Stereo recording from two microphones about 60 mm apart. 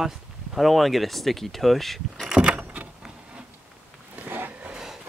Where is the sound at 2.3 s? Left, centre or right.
Centre.